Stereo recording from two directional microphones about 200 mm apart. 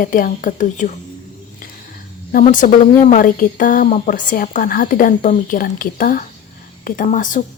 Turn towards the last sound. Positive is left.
turn(degrees=40)  # may be behind; listen again after turning